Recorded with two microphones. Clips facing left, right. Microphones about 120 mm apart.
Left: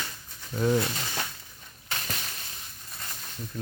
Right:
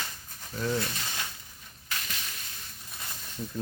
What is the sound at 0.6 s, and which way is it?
Speech, 25° left (ahead or behind).